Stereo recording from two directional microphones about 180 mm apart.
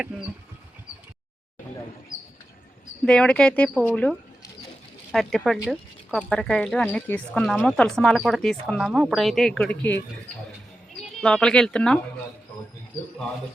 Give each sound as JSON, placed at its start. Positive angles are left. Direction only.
{"t": 3.1, "sound": "speech", "side_deg": 5}